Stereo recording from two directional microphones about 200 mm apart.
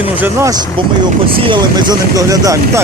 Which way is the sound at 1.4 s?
25° right (ahead or behind).